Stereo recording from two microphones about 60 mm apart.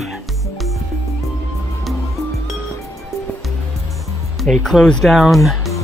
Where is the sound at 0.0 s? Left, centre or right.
Centre.